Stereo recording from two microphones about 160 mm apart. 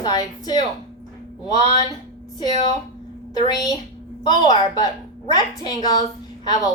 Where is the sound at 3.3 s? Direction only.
25° left (ahead or behind).